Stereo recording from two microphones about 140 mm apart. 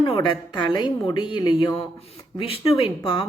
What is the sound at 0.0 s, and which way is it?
Speech, 35° left (ahead or behind).